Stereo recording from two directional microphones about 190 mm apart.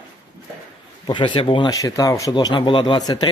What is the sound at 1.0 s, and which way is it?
Speech, 25° left (ahead or behind).